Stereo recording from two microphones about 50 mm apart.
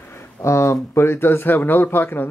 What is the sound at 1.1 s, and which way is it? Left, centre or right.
Speech, left.